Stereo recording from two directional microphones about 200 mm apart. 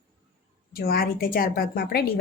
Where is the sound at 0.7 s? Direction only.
50° left (ahead or behind).